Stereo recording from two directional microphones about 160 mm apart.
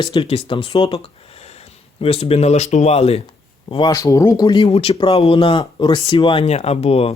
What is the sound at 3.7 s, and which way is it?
Speech, 25° left (ahead or behind).